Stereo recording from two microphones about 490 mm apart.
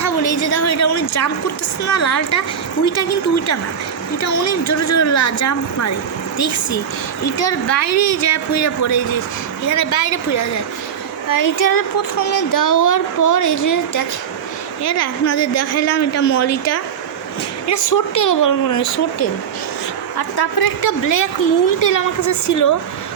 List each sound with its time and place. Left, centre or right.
0.0 s a woman's voice: left
20.1 s a woman's voice: left